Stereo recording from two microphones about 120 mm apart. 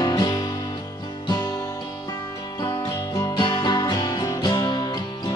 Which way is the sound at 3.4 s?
40° left (ahead or behind).